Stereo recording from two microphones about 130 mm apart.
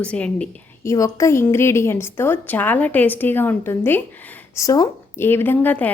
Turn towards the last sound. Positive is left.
turn(degrees=15)  # may be behind; listen again after turning